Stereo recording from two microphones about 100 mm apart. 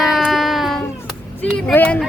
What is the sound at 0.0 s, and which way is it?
Baby cry, centre (ahead or behind).